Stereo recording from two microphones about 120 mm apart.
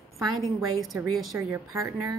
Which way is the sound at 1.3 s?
25° right (ahead or behind).